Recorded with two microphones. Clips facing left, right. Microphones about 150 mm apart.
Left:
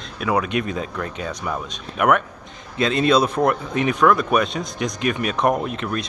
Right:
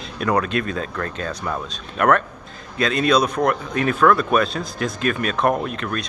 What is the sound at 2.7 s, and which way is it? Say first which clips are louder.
Speech: left 1 dB; 25° left (ahead or behind).